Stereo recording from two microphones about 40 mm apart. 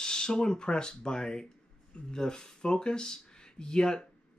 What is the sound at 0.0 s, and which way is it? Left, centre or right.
Speech, centre.